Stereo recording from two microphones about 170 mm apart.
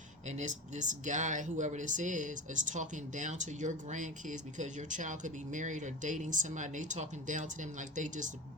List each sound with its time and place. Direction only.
0.3 s speech: 45° right (ahead or behind)